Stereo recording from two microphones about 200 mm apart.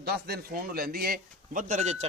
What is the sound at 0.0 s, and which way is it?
A man's voice, 50° right (ahead or behind).